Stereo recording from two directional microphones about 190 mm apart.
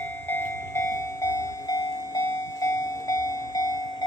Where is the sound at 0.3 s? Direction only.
10° left (ahead or behind).